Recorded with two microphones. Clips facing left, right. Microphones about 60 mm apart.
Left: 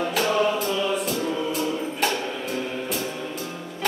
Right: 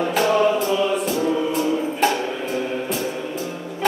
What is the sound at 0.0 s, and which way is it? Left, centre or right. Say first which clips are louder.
Music: right 4 dB; centre.